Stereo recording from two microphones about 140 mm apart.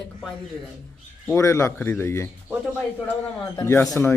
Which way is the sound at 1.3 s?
20° left (ahead or behind).